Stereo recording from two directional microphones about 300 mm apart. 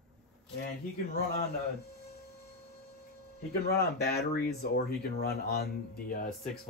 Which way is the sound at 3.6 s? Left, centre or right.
Left.